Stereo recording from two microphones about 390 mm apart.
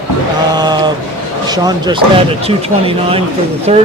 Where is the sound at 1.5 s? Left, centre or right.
Centre.